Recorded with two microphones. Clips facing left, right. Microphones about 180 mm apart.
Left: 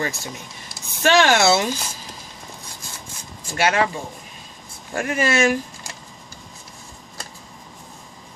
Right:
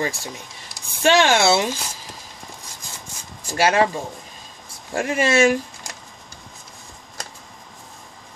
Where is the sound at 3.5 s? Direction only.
30° right (ahead or behind).